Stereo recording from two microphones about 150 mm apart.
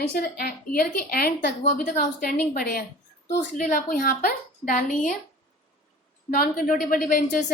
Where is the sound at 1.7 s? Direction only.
65° left (ahead or behind).